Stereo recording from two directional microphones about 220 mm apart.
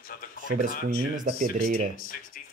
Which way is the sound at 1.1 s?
35° right (ahead or behind).